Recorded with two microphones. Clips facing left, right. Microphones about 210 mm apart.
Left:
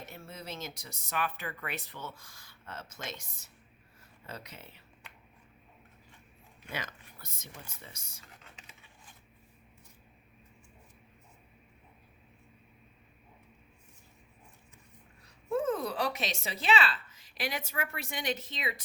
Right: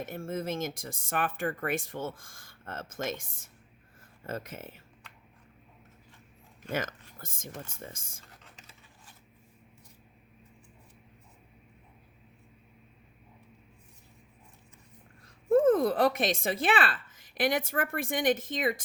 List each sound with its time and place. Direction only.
0.0 s speech: 50° right (ahead or behind)
6.7 s speech: 45° right (ahead or behind)
15.4 s a woman's voice: 50° right (ahead or behind)